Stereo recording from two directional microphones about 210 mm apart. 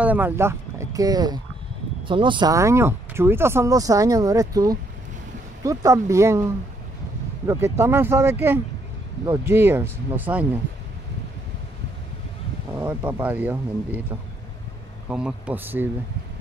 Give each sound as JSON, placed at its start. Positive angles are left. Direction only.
{"t": 0.0, "sound": "speech", "side_deg": -10}
{"t": 12.7, "sound": "speech", "side_deg": -5}
{"t": 15.0, "sound": "speech", "side_deg": -5}